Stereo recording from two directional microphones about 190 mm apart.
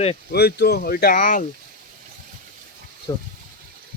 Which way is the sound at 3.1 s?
20° left (ahead or behind).